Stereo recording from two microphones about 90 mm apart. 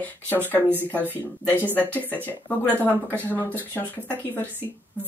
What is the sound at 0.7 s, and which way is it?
Speech, 25° right (ahead or behind).